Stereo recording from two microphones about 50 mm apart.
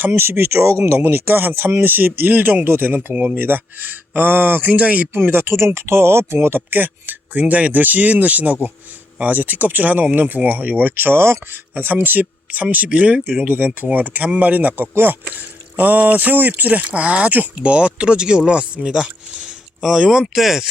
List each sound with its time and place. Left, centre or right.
0.1 s speech: right
4.8 s speech: right
5.1 s speech: right
12.9 s speech: right
13.5 s speech: right
14.9 s speech: right
15.8 s speech: right; by 20.7 s centre